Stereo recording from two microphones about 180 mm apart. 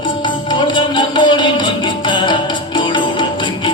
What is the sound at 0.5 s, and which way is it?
Music, 25° left (ahead or behind).